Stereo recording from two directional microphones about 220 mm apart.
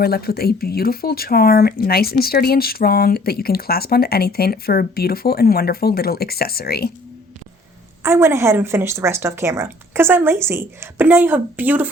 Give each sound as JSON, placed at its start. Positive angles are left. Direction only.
{"t": 0.0, "sound": "speech", "side_deg": 45}
{"t": 8.0, "sound": "speech", "side_deg": -10}